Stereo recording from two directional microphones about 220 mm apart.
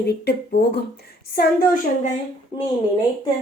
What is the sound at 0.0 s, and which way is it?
A woman's voice, 45° left (ahead or behind).